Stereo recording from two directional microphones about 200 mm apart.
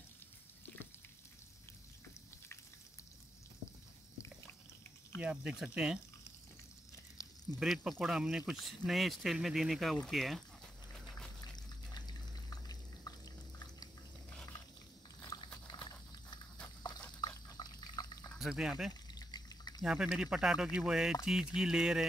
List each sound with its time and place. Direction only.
5.2 s speech: 5° right (ahead or behind)
7.5 s speech: centre (ahead or behind)
11.5 s water: 20° left (ahead or behind)
15.2 s dog: 20° left (ahead or behind)
17.6 s water: 20° left (ahead or behind)
18.3 s speech: centre (ahead or behind)
19.1 s water: 20° left (ahead or behind)
19.8 s speech: 5° right (ahead or behind)